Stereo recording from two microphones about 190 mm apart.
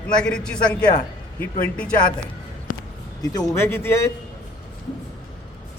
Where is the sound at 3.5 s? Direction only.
15° left (ahead or behind).